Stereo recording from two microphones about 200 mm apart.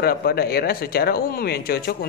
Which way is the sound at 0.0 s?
50° left (ahead or behind).